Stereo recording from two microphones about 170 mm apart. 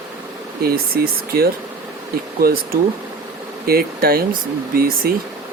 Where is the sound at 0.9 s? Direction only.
65° right (ahead or behind).